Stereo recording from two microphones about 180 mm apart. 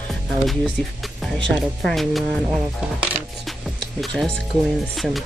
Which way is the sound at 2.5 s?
10° right (ahead or behind).